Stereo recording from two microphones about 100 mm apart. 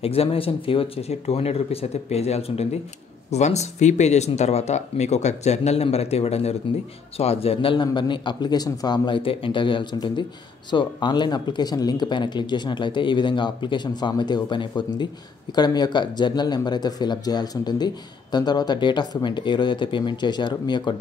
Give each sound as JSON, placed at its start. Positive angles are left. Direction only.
{"t": 0.0, "sound": "speech", "side_deg": 75}
{"t": 7.2, "sound": "speech", "side_deg": 80}
{"t": 7.7, "sound": "speech", "side_deg": 50}